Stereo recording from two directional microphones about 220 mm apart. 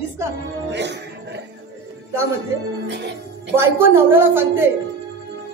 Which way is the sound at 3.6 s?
10° right (ahead or behind).